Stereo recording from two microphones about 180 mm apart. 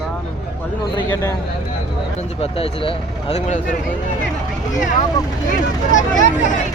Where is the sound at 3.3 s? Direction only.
40° left (ahead or behind).